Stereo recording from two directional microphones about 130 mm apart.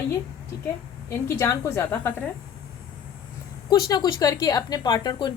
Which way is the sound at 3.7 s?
30° left (ahead or behind).